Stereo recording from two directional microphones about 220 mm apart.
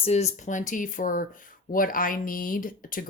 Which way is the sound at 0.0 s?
30° left (ahead or behind).